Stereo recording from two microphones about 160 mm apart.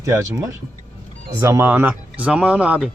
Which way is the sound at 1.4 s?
15° right (ahead or behind).